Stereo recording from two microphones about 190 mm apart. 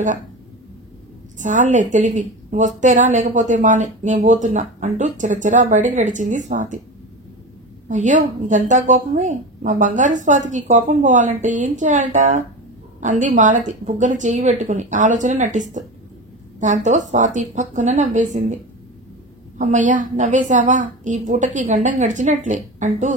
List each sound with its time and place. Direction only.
1.4 s a woman's voice: 40° right (ahead or behind)
7.9 s a woman's voice: 40° right (ahead or behind)
19.6 s a woman's voice: 40° right (ahead or behind)